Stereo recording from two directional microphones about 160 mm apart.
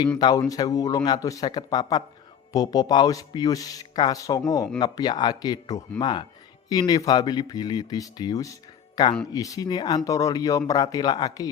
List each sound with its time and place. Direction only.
0.2 s speech: 25° left (ahead or behind)